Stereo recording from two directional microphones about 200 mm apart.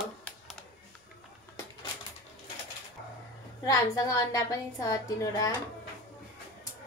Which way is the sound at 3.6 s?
15° left (ahead or behind).